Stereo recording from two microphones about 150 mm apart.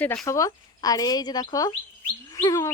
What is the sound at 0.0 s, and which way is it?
Speech, 10° left (ahead or behind).